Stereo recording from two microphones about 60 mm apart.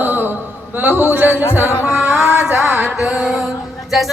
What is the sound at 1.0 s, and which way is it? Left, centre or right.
Speech, right.